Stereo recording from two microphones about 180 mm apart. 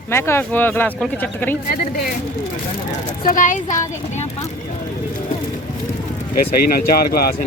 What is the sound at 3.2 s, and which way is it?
A woman's voice, 50° left (ahead or behind).